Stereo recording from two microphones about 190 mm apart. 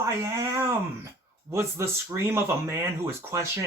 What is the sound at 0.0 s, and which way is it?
Speech, 15° right (ahead or behind).